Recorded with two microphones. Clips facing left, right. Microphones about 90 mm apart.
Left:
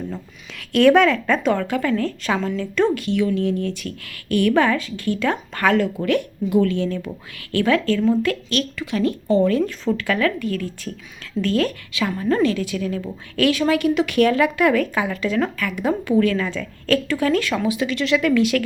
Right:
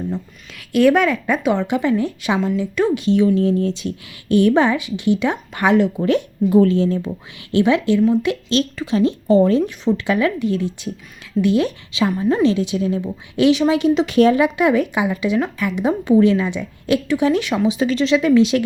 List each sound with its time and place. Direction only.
0.5 s a woman's voice: 5° right (ahead or behind)
3.0 s a woman's voice: 25° right (ahead or behind)
7.5 s a woman's voice: 20° right (ahead or behind)
9.6 s a woman's voice: 20° right (ahead or behind)
17.7 s a woman's voice: 30° right (ahead or behind)